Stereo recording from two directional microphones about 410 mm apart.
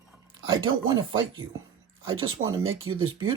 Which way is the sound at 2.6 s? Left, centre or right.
Right.